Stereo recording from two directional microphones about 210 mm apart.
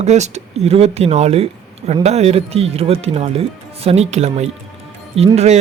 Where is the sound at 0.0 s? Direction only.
35° right (ahead or behind).